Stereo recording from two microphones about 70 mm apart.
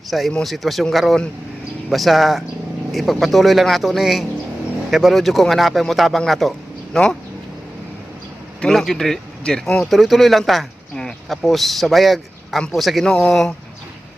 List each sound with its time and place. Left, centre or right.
0.1 s a man's voice: centre
8.6 s a man's voice: centre
13.1 s speech: centre